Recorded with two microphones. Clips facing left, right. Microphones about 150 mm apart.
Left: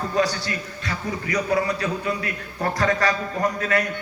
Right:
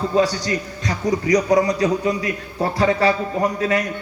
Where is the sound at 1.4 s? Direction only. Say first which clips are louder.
Right 6 dB; 15° right (ahead or behind).